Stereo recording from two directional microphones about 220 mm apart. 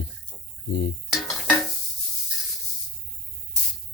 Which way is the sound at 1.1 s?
Centre (ahead or behind).